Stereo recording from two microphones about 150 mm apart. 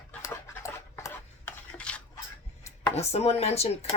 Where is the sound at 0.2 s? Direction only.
20° left (ahead or behind).